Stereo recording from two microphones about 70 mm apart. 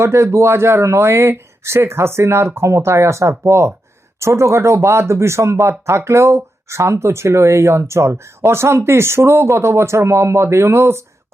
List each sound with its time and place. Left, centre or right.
0.0 s speech: right